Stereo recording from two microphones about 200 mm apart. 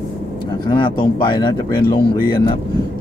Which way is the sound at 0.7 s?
20° left (ahead or behind).